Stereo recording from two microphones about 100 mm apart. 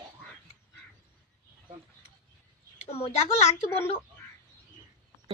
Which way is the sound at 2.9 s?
80° left.